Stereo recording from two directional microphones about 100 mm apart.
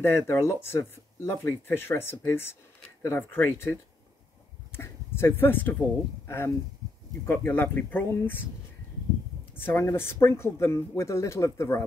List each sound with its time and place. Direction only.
0.0 s speech: 25° left (ahead or behind)
3.2 s speech: 20° left (ahead or behind)
4.7 s speech: 25° left (ahead or behind)
9.6 s a woman's voice: 20° left (ahead or behind)